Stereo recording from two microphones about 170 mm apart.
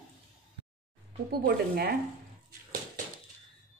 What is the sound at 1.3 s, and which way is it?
Speech, 65° right (ahead or behind).